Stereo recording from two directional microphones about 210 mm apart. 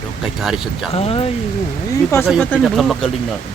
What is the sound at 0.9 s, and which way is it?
Speech, 30° left (ahead or behind).